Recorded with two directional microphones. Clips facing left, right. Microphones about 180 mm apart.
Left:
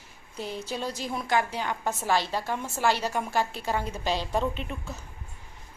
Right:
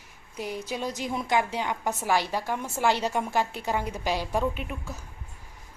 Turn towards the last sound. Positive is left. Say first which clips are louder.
# even
turn(degrees=-10)  # may be behind; listen again after turning